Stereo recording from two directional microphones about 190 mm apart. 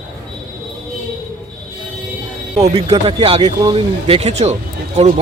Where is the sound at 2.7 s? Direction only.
30° right (ahead or behind).